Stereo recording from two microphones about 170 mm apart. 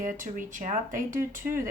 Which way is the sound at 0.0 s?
50° right (ahead or behind).